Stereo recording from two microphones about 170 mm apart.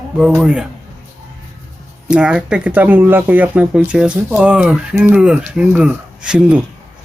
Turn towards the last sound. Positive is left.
turn(degrees=-5)  # may be behind; listen again after turning